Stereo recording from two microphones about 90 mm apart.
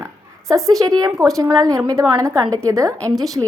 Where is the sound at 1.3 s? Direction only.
40° right (ahead or behind).